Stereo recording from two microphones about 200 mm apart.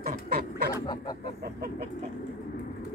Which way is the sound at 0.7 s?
20° left (ahead or behind).